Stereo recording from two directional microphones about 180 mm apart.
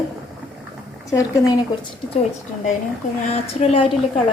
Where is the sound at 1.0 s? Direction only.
15° left (ahead or behind).